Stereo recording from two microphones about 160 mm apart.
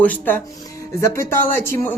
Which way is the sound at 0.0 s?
10° left (ahead or behind).